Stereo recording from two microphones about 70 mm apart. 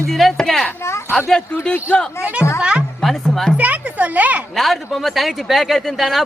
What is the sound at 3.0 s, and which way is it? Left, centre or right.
Music, centre.